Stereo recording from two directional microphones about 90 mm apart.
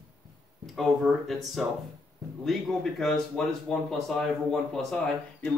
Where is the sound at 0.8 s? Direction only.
Centre (ahead or behind).